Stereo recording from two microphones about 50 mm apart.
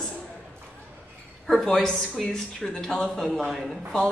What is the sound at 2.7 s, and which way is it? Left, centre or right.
Speech, centre.